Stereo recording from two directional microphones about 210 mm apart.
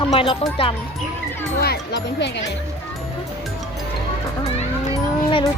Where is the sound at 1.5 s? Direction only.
50° left (ahead or behind).